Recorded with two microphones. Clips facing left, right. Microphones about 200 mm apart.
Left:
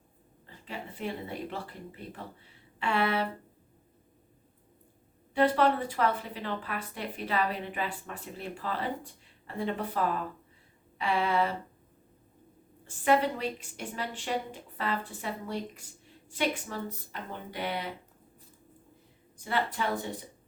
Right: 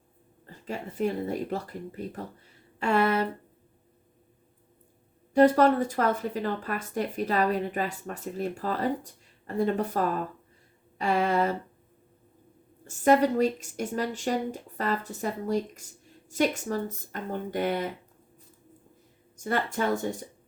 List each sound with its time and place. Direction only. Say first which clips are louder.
0.4 s speech: right 5 dB; 45° right (ahead or behind)
5.3 s speech: right 6 dB; 45° right (ahead or behind)
12.8 s speech: right 5 dB; 45° right (ahead or behind)
19.4 s speech: right 3 dB; 45° right (ahead or behind)